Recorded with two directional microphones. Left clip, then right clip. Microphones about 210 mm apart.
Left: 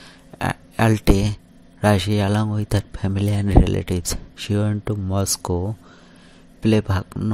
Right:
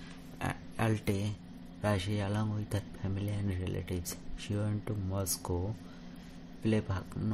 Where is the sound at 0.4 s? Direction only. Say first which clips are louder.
Left 14 dB; 40° left (ahead or behind).